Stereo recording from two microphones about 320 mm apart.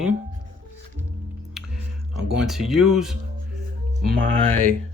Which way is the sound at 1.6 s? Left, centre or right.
Centre.